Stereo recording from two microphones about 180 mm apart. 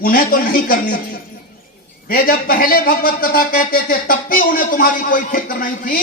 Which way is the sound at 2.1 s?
55° left (ahead or behind).